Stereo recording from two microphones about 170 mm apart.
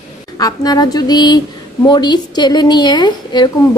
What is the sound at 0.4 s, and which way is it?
A woman's voice, 20° left (ahead or behind).